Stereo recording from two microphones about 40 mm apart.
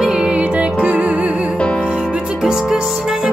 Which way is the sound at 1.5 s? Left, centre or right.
Left.